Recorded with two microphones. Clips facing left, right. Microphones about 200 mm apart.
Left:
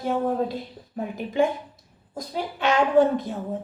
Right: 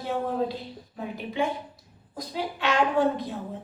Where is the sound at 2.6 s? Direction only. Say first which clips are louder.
Left 5 dB; 45° left (ahead or behind).